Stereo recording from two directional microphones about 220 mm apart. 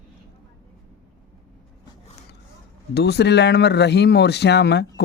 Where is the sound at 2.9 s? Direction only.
50° left (ahead or behind).